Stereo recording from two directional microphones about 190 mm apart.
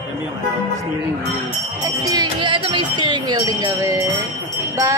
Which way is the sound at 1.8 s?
20° right (ahead or behind).